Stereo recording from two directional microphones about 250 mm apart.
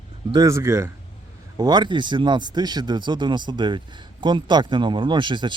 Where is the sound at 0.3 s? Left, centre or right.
Centre.